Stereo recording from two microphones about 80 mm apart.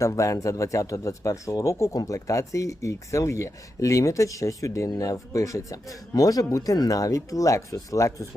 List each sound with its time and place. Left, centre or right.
0.0 s speech: left